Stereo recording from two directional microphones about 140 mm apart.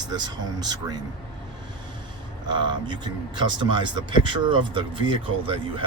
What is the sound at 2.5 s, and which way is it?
Speech, 35° right (ahead or behind).